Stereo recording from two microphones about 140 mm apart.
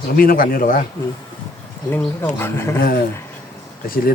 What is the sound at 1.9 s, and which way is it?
Speech, 15° left (ahead or behind).